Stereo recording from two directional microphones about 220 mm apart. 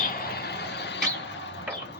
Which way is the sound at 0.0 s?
45° left (ahead or behind).